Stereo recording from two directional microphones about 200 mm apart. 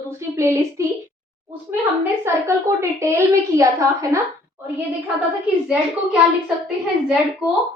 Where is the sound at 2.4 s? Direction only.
15° right (ahead or behind).